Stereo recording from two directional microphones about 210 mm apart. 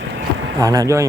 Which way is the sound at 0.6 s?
15° right (ahead or behind).